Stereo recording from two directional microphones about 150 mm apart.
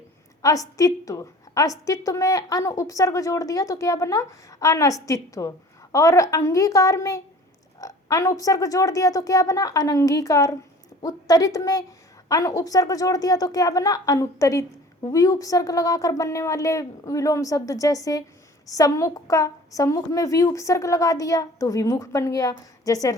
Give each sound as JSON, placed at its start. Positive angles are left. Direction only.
{"t": 0.4, "sound": "a woman's voice", "side_deg": 25}